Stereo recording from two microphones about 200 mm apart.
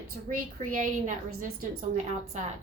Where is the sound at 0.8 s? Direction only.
40° right (ahead or behind).